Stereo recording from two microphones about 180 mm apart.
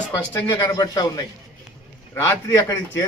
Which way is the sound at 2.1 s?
10° left (ahead or behind).